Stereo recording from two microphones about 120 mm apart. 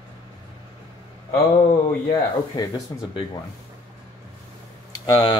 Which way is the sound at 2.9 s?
25° left (ahead or behind).